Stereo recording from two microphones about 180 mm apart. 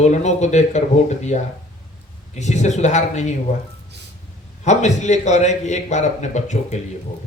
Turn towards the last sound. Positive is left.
turn(degrees=40)  # may be behind; listen again after turning